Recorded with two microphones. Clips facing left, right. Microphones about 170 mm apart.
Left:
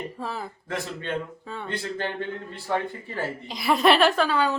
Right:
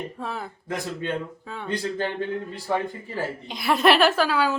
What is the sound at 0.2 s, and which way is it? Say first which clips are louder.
A woman's voice: even; centre (ahead or behind).